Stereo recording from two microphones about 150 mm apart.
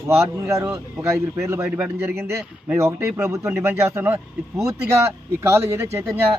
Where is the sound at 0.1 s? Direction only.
20° right (ahead or behind).